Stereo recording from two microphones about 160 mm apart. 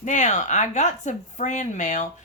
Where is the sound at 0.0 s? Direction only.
50° left (ahead or behind).